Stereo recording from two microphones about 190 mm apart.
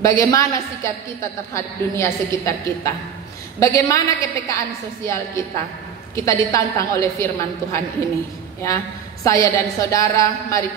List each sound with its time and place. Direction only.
0.0 s a woman's voice: 15° left (ahead or behind)